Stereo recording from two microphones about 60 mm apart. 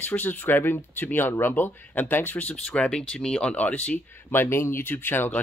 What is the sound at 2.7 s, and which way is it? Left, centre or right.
Speech, centre.